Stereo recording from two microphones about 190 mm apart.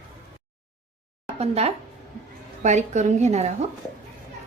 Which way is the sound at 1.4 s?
35° right (ahead or behind).